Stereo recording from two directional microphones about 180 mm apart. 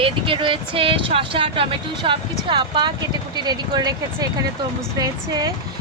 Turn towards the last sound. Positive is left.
turn(degrees=-20)  # may be behind; listen again after turning